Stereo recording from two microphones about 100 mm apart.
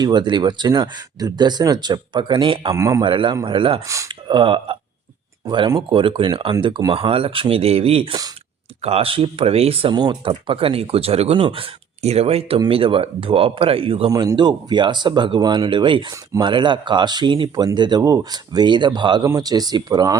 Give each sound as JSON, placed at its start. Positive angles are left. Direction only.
{"t": 0.0, "sound": "speech", "side_deg": -45}
{"t": 2.7, "sound": "speech", "side_deg": -30}
{"t": 3.0, "sound": "speech", "side_deg": -55}
{"t": 3.8, "sound": "speech", "side_deg": -30}
{"t": 4.1, "sound": "speech", "side_deg": -55}
{"t": 5.5, "sound": "speech", "side_deg": -45}
{"t": 9.9, "sound": "speech", "side_deg": -45}
{"t": 11.4, "sound": "speech", "side_deg": -70}
{"t": 12.5, "sound": "speech", "side_deg": -65}
{"t": 14.1, "sound": "speech", "side_deg": -35}
{"t": 14.3, "sound": "speech", "side_deg": -50}
{"t": 17.5, "sound": "speech", "side_deg": -40}